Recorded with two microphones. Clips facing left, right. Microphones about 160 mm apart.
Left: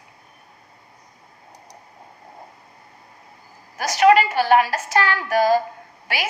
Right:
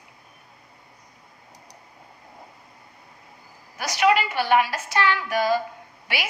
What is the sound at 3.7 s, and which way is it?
A woman's voice, 45° left (ahead or behind).